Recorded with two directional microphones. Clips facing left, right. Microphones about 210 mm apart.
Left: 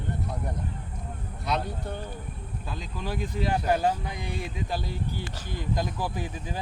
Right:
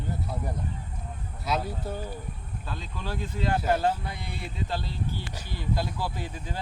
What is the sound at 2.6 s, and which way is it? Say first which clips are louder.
Speech: left 1 dB; 15° left (ahead or behind).